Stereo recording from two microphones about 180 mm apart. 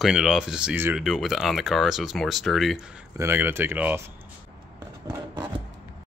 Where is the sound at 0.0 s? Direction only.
Centre (ahead or behind).